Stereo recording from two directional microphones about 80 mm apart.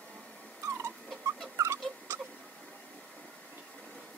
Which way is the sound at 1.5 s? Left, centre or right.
Right.